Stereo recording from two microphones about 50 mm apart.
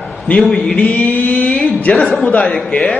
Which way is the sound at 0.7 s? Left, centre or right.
Left.